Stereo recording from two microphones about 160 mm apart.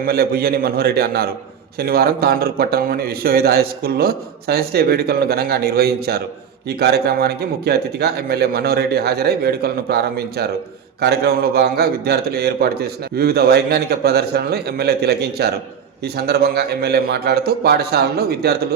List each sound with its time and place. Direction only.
0.0 s a man's voice: 75° right (ahead or behind)
6.7 s a man's voice: 90° right